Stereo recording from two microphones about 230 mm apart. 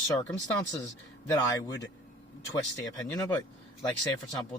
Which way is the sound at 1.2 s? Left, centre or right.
Centre.